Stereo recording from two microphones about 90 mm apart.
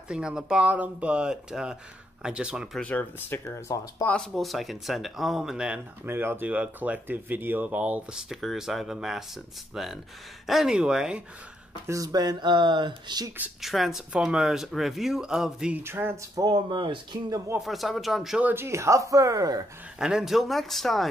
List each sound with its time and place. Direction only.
0.1 s speech: 10° right (ahead or behind)
2.8 s speech: 20° left (ahead or behind)
4.1 s speech: 5° left (ahead or behind)
6.0 s speech: 25° right (ahead or behind)
8.3 s speech: centre (ahead or behind)
11.9 s speech: 45° right (ahead or behind)
13.6 s speech: centre (ahead or behind)
15.7 s speech: 25° right (ahead or behind)
16.3 s speech: 40° right (ahead or behind)
16.6 s speech: 60° right (ahead or behind)
17.6 s speech: centre (ahead or behind)
18.4 s speech: 25° right (ahead or behind)
20.0 s speech: 5° right (ahead or behind)